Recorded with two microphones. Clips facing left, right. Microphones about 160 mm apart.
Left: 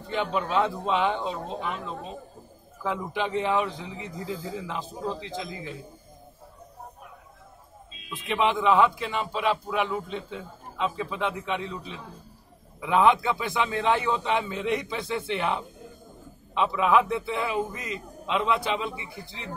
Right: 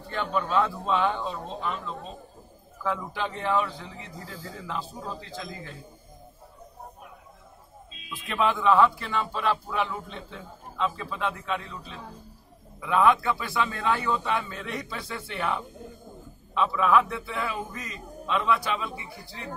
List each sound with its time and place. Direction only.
0.1 s a man's voice: 15° left (ahead or behind)
2.8 s a man's voice: 15° left (ahead or behind)
8.1 s a man's voice: 20° left (ahead or behind)